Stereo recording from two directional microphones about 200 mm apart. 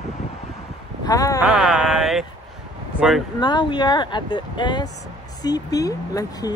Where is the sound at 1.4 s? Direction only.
Centre (ahead or behind).